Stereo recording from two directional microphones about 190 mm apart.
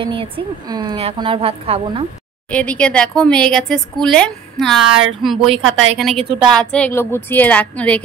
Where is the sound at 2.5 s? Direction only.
5° left (ahead or behind).